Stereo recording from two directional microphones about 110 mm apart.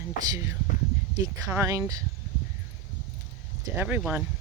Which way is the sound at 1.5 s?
25° right (ahead or behind).